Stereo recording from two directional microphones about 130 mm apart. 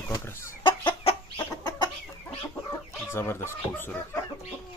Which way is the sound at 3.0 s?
20° left (ahead or behind).